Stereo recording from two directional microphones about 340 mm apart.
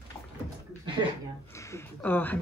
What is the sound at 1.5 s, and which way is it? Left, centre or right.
Speech, centre.